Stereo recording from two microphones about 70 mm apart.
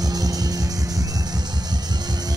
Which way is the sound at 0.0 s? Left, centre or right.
Right.